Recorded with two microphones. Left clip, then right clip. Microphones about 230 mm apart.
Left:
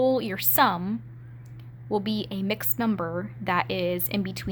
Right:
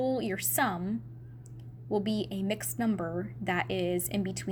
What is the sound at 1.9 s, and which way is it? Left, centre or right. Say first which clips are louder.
Speech: left 3 dB; left.